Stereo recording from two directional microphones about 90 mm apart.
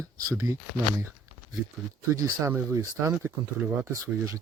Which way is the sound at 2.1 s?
35° right (ahead or behind).